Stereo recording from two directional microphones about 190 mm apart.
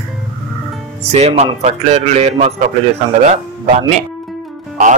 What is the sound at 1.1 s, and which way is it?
Speech, 35° right (ahead or behind).